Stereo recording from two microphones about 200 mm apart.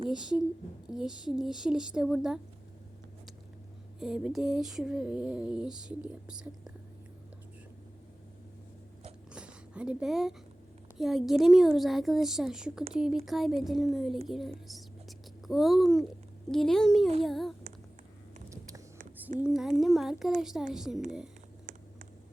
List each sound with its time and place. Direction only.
0.1 s a woman's voice: 5° right (ahead or behind)
4.0 s a woman's voice: centre (ahead or behind)
9.3 s a sound: 5° right (ahead or behind)
10.9 s a woman's voice: centre (ahead or behind)
18.4 s a sound: 15° right (ahead or behind)
19.4 s a woman's voice: 5° right (ahead or behind)